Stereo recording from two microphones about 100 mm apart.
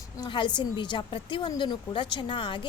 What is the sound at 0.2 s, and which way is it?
A woman's voice, 50° left (ahead or behind).